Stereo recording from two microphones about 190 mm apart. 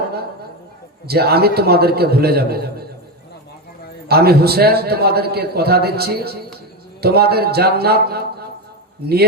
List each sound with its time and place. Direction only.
1.0 s a man's voice: 55° right (ahead or behind)
4.1 s a man's voice: 55° right (ahead or behind)